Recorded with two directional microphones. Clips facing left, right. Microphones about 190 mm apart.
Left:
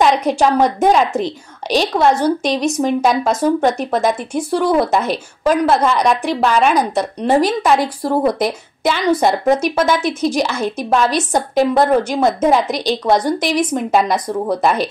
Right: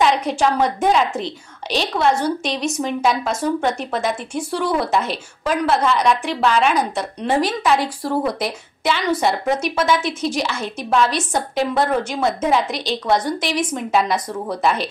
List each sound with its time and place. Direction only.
0.0 s a woman's voice: 40° left (ahead or behind)